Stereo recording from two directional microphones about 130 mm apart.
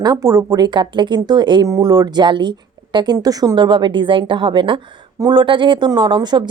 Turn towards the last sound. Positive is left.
turn(degrees=-35)  # may be behind; listen again after turning